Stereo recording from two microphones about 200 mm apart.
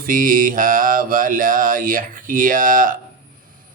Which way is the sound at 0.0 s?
45° right (ahead or behind).